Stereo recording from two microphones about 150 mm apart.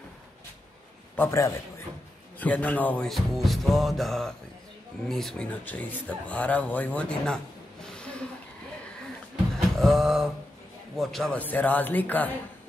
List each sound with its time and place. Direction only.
1.1 s a man's voice: 15° left (ahead or behind)
3.1 s music: centre (ahead or behind)
5.0 s speech: 5° left (ahead or behind)
7.9 s a sound: 5° left (ahead or behind)
9.8 s a sound: centre (ahead or behind)
11.0 s speech: centre (ahead or behind)